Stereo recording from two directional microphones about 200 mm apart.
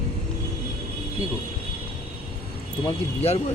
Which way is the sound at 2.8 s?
30° left (ahead or behind).